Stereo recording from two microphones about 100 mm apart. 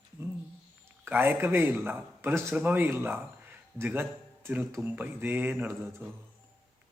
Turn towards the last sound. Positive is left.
turn(degrees=-20)  # may be behind; listen again after turning